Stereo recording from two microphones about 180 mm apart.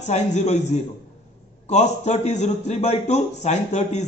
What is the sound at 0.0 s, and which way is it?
A man's voice, 40° left (ahead or behind).